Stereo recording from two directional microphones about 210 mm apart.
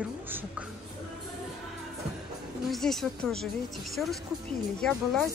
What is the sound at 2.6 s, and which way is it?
Speech, centre (ahead or behind).